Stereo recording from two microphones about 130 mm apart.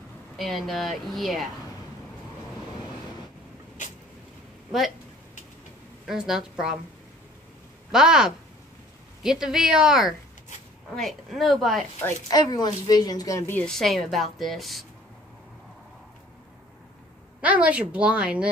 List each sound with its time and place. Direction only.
0.4 s a woman's voice: centre (ahead or behind)
4.6 s speech: centre (ahead or behind)
6.0 s a woman's voice: 5° right (ahead or behind)
7.9 s a woman's voice: 5° right (ahead or behind)
12.3 s a woman's voice: 30° left (ahead or behind)
13.5 s a woman's voice: 5° left (ahead or behind)
17.4 s a woman's voice: 10° right (ahead or behind)